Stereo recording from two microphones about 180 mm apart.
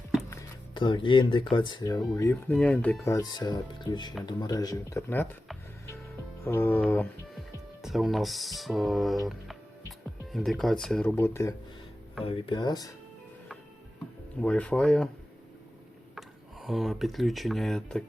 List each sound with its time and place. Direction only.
0.7 s speech: 25° left (ahead or behind); by 5.4 s 10° left (ahead or behind)
6.4 s speech: 10° left (ahead or behind)
7.8 s speech: centre (ahead or behind)
12.2 s speech: 30° left (ahead or behind)
14.4 s speech: 5° left (ahead or behind)
16.1 s speech: centre (ahead or behind)